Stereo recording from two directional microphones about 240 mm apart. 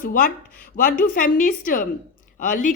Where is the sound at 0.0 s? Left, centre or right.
Left.